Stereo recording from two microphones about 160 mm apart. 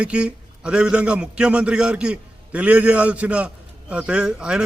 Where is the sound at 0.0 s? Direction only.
5° right (ahead or behind).